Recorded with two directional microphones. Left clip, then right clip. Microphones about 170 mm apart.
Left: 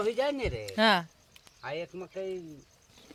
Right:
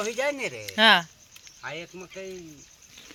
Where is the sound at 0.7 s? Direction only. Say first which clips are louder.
Right 7 dB; 5° left (ahead or behind).